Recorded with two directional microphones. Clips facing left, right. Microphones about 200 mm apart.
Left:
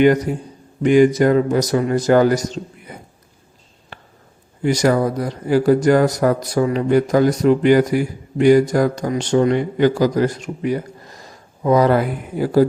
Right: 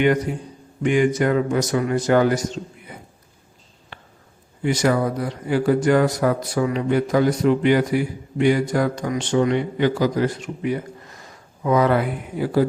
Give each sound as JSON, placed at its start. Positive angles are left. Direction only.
{"t": 0.0, "sound": "speech", "side_deg": 40}
{"t": 4.6, "sound": "speech", "side_deg": 40}